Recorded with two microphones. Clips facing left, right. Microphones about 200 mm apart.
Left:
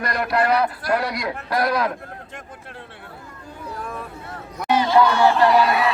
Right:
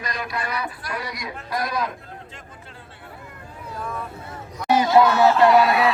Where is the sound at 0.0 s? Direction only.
65° left (ahead or behind).